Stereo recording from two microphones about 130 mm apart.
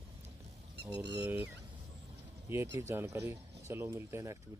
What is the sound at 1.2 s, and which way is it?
Speech, 10° right (ahead or behind).